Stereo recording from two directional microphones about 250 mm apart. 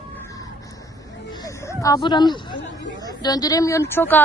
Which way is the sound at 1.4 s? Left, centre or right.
Centre.